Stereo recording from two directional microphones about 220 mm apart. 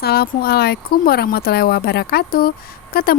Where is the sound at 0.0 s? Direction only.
45° left (ahead or behind).